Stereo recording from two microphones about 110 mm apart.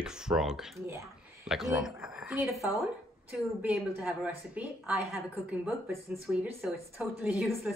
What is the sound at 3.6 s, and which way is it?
A woman's voice, 10° right (ahead or behind).